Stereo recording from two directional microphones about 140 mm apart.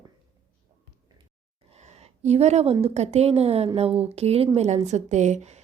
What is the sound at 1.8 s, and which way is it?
A woman's voice, 50° right (ahead or behind).